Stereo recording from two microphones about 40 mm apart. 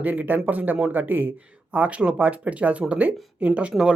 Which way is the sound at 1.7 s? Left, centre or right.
Right.